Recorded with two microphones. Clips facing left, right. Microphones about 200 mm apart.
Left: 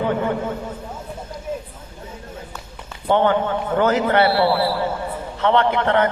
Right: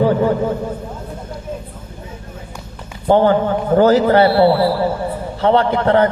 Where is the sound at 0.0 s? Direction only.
35° right (ahead or behind).